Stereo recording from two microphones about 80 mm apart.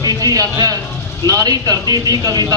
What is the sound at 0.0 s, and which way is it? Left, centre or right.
A man's voice, right.